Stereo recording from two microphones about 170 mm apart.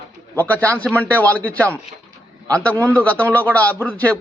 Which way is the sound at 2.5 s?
5° left (ahead or behind).